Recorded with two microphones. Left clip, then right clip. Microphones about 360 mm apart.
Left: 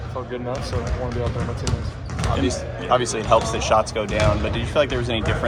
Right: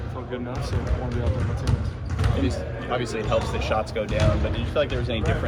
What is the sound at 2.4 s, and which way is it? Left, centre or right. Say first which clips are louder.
Speech: left 6 dB; centre.